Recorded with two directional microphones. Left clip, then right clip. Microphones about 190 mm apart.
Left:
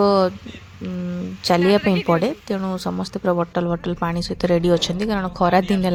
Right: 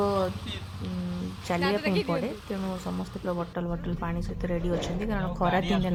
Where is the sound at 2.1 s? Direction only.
40° left (ahead or behind).